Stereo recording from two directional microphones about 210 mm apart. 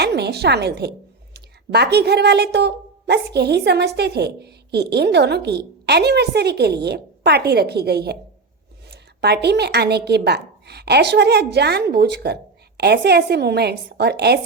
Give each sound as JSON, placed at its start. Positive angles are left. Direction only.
{"t": 0.0, "sound": "a woman's voice", "side_deg": -50}